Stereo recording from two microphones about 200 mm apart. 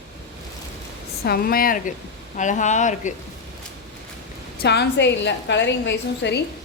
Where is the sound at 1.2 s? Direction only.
50° left (ahead or behind).